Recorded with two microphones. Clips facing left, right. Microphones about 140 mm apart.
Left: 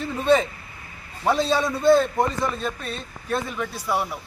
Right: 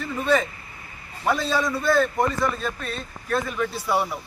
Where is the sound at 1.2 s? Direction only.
25° left (ahead or behind).